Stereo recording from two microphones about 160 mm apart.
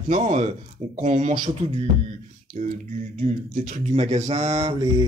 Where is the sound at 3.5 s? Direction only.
50° right (ahead or behind).